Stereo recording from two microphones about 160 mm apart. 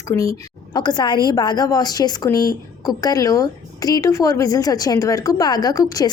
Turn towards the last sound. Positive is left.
turn(degrees=20)  # may be behind; listen again after turning